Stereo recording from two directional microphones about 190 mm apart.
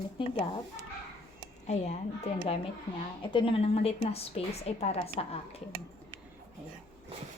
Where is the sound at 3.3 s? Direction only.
30° left (ahead or behind).